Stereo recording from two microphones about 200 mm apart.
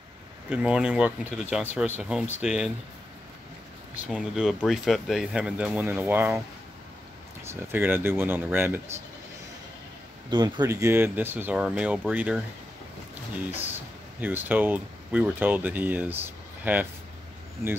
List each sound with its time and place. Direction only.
0.5 s speech: 5° right (ahead or behind)
4.1 s speech: centre (ahead or behind)
7.4 s speech: 10° right (ahead or behind)
10.3 s speech: 20° right (ahead or behind)
14.2 s speech: 10° right (ahead or behind)